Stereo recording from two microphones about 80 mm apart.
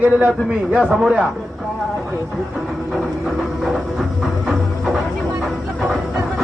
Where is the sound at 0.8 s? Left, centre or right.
Centre.